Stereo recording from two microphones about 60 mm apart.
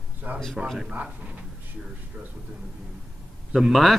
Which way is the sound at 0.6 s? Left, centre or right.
Centre.